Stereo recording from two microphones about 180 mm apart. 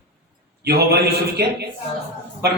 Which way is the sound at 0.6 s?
60° right (ahead or behind).